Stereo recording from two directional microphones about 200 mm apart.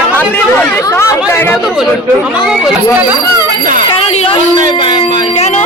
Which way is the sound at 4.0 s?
30° left (ahead or behind).